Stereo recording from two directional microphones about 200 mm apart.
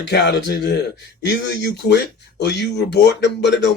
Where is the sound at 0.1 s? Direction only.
55° left (ahead or behind).